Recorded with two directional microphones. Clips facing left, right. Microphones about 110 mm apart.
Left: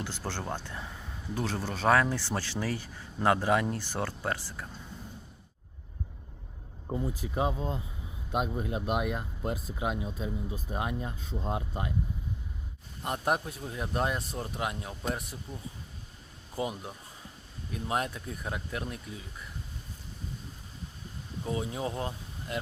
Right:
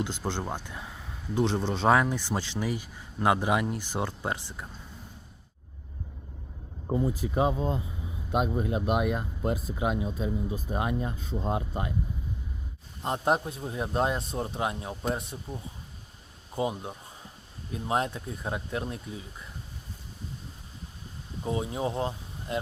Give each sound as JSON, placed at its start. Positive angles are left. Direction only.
{"t": 0.0, "sound": "speech", "side_deg": -15}
{"t": 1.4, "sound": "speech", "side_deg": -20}
{"t": 6.8, "sound": "speech", "side_deg": -70}
{"t": 8.3, "sound": "speech", "side_deg": -55}
{"t": 13.0, "sound": "speech", "side_deg": -25}
{"t": 21.4, "sound": "speech", "side_deg": -25}